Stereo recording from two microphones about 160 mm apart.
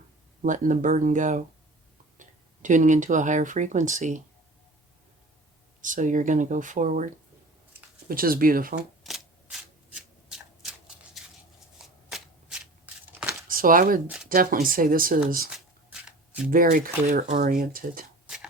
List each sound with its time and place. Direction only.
0.4 s speech: 55° right (ahead or behind)
5.8 s speech: 55° right (ahead or behind)
8.0 s speech: 65° right (ahead or behind)
9.0 s shuffling cards: centre (ahead or behind)
13.5 s speech: 60° right (ahead or behind)
15.4 s writing: 5° right (ahead or behind)
16.5 s speech: 60° right (ahead or behind)